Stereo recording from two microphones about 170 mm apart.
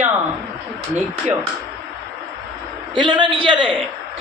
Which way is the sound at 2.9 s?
25° right (ahead or behind).